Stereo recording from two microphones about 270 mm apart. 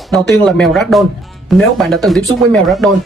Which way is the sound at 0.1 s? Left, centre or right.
Centre.